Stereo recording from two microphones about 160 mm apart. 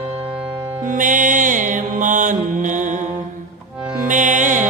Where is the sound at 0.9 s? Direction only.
55° right (ahead or behind).